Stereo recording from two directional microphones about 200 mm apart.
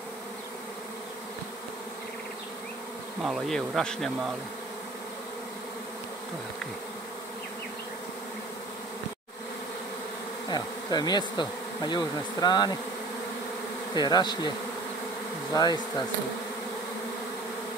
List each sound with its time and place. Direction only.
3.3 s speech: centre (ahead or behind)
10.5 s bee: 20° left (ahead or behind)
13.9 s bee: 20° left (ahead or behind)
15.5 s bee: 20° left (ahead or behind)